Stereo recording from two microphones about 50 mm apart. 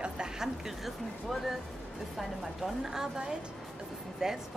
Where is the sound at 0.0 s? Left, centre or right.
Centre.